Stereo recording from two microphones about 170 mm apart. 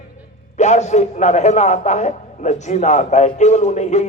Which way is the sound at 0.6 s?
45° left (ahead or behind).